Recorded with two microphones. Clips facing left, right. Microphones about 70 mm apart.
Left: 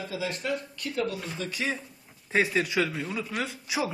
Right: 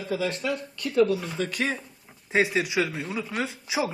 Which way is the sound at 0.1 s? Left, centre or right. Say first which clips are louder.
Right 7 dB; right.